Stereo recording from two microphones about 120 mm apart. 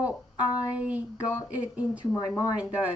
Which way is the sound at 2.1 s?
30° left (ahead or behind).